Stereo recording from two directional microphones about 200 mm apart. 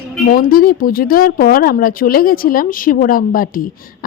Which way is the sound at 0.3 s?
45° left (ahead or behind).